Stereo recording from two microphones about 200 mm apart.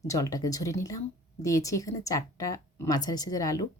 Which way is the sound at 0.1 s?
15° left (ahead or behind).